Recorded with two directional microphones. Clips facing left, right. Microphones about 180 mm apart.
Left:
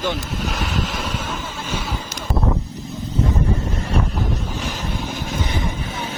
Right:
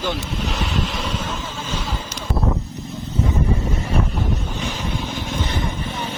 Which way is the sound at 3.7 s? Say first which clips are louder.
Even; centre (ahead or behind).